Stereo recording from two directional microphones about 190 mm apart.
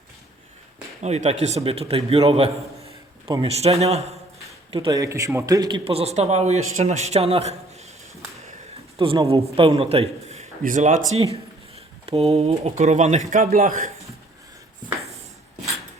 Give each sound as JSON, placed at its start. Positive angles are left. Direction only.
{"t": 1.0, "sound": "a man's voice", "side_deg": -35}
{"t": 9.0, "sound": "a man's voice", "side_deg": -30}